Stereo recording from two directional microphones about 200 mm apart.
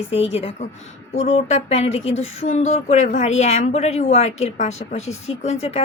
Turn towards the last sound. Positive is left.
turn(degrees=30)  # may be behind; listen again after turning